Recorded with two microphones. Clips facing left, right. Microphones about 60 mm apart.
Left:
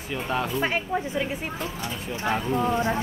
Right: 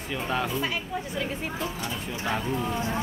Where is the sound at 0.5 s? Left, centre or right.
Left.